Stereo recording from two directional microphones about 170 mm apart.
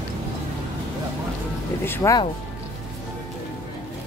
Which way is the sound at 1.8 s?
15° left (ahead or behind).